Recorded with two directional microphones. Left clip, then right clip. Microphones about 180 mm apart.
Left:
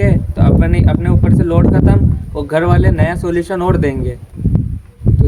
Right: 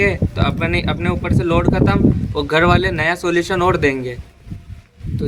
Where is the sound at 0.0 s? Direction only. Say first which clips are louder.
Even; 20° left (ahead or behind).